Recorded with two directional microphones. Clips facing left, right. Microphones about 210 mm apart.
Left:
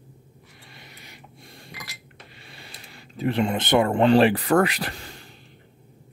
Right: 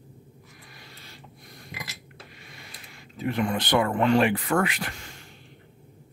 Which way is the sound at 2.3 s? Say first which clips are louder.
Left 1 dB; 30° left (ahead or behind).